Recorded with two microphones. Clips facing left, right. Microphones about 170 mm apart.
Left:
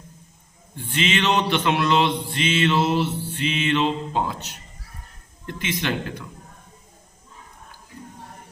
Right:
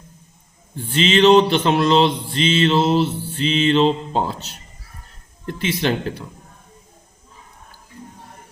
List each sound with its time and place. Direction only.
0.8 s mantra: 30° right (ahead or behind)